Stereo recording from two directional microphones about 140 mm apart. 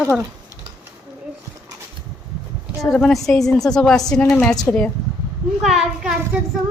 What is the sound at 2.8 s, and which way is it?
A woman's voice, 5° left (ahead or behind).